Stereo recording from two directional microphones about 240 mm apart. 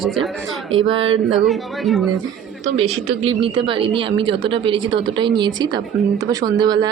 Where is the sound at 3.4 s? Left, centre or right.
Right.